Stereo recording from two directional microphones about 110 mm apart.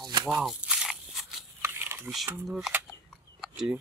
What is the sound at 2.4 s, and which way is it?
Speech, 5° right (ahead or behind).